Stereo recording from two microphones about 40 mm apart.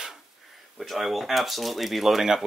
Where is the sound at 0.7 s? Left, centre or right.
Centre.